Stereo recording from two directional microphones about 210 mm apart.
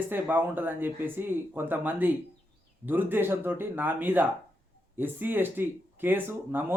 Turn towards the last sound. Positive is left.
turn(degrees=-10)  # may be behind; listen again after turning